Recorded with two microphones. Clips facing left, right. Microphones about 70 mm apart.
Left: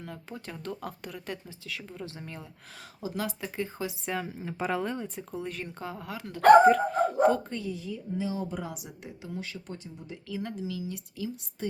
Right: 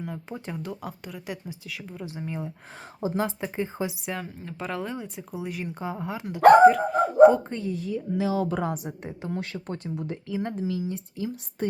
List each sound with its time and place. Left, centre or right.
0.0 s speech: centre
3.0 s speech: right
4.0 s speech: centre
6.7 s speech: centre
7.7 s speech: right
8.6 s a woman's voice: right
9.3 s speech: right
10.2 s a woman's voice: right